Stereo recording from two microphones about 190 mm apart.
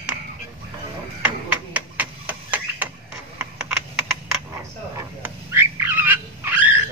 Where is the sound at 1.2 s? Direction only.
10° right (ahead or behind).